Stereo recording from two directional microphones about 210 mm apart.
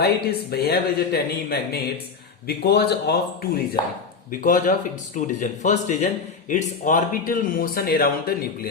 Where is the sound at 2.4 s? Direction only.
50° left (ahead or behind).